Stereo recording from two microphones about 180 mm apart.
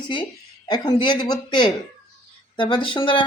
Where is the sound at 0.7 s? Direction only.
25° left (ahead or behind).